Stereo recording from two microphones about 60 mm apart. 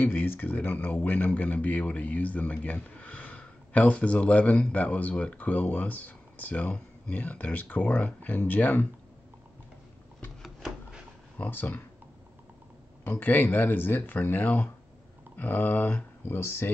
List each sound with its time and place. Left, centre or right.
0.0 s a man's voice: left
10.4 s a sound: centre
11.3 s a man's voice: left
13.2 s speech: left
16.3 s speech: left